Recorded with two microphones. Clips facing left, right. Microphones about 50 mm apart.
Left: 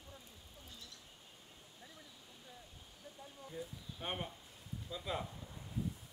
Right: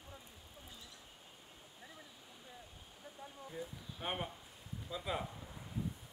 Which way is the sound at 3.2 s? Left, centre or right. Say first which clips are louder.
Right 1 dB; centre.